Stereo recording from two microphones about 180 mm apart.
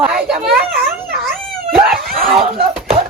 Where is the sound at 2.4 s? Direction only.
35° right (ahead or behind).